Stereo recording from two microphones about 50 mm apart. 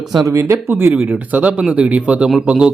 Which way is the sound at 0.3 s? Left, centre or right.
Right.